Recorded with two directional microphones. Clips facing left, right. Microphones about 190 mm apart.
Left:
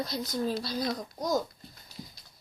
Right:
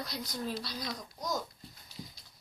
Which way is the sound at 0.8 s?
55° left (ahead or behind).